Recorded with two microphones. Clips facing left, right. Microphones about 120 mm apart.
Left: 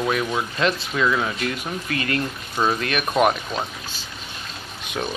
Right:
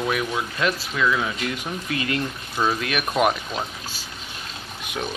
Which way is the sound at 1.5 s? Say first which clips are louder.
Left 1 dB; 15° right (ahead or behind).